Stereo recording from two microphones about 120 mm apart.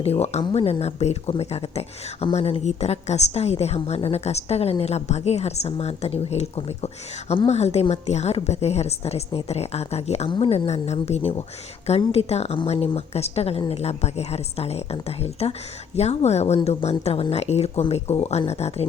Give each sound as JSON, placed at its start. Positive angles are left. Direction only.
{"t": 0.0, "sound": "a woman's voice", "side_deg": 60}
{"t": 10.2, "sound": "speech", "side_deg": 45}
{"t": 10.7, "sound": "a woman's voice", "side_deg": 65}